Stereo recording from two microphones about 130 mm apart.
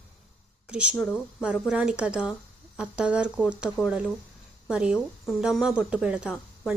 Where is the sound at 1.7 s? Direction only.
5° right (ahead or behind).